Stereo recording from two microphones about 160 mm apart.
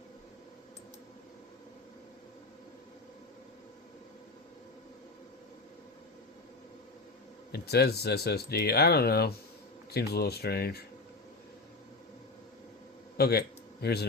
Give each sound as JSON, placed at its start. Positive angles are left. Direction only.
{"t": 7.5, "sound": "speech", "side_deg": 90}
{"t": 13.1, "sound": "speech", "side_deg": 80}
{"t": 13.8, "sound": "speech", "side_deg": 90}